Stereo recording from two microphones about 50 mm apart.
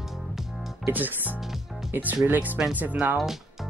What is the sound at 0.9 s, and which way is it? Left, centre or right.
Speech, right.